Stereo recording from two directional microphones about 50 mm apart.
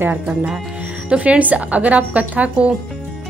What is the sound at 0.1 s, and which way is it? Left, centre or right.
A woman's voice, right.